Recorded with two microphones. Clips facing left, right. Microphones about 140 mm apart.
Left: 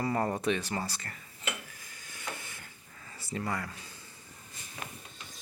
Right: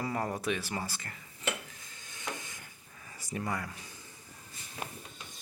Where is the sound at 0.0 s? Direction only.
Centre (ahead or behind).